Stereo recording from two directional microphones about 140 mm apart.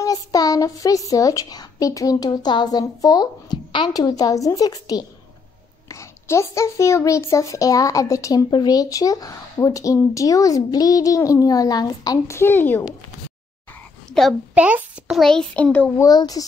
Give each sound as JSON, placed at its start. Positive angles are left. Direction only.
{"t": 0.0, "sound": "a child's voice", "side_deg": 25}
{"t": 14.5, "sound": "speech", "side_deg": -10}
{"t": 15.1, "sound": "a child's voice", "side_deg": 5}
{"t": 16.0, "sound": "a child's voice", "side_deg": 25}